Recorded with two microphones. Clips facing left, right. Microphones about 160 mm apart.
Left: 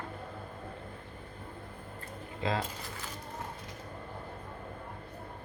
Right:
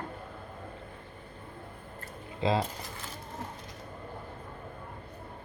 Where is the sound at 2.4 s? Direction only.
30° right (ahead or behind).